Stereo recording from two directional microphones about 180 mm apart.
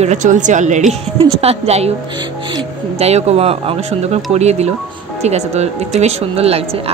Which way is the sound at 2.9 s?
35° right (ahead or behind).